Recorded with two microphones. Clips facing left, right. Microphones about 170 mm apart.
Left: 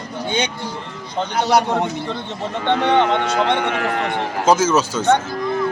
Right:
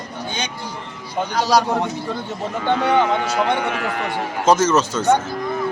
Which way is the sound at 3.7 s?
50° left (ahead or behind).